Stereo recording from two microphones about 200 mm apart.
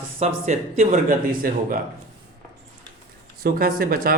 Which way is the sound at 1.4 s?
45° right (ahead or behind).